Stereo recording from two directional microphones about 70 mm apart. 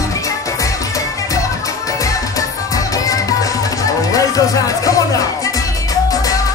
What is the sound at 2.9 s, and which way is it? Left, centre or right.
Music, left.